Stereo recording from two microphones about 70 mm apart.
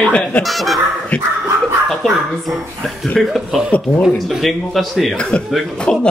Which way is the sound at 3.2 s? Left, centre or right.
Centre.